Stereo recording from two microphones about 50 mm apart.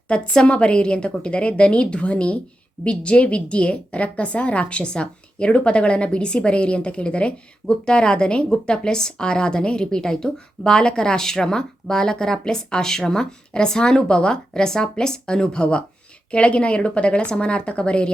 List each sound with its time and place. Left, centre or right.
0.1 s a woman's voice: left